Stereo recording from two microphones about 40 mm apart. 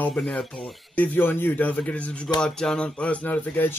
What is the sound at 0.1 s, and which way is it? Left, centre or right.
Speech, left.